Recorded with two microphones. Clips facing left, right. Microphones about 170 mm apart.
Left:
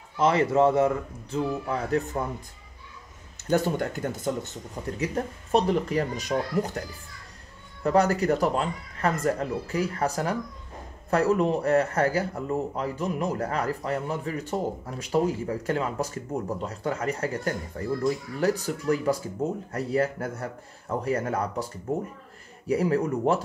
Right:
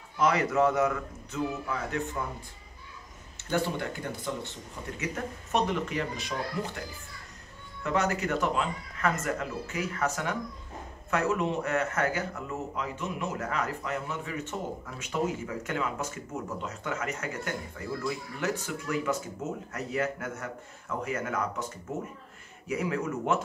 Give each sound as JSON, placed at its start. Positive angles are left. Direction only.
{"t": 0.2, "sound": "a man's voice", "side_deg": 30}
{"t": 3.4, "sound": "a man's voice", "side_deg": 45}
{"t": 7.8, "sound": "a man's voice", "side_deg": 35}
{"t": 22.7, "sound": "a man's voice", "side_deg": 35}